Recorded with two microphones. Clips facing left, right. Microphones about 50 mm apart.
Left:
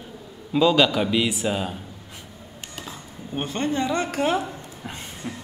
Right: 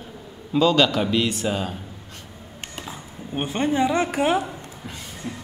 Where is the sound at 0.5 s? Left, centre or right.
Centre.